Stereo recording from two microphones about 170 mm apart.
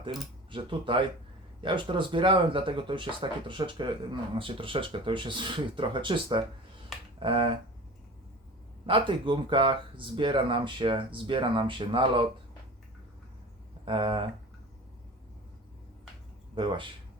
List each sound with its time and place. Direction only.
0.5 s speech: 30° right (ahead or behind)
7.2 s finger snapping: 30° right (ahead or behind)
8.9 s speech: 30° right (ahead or behind)
13.8 s speech: 30° right (ahead or behind)
16.6 s speech: 30° right (ahead or behind)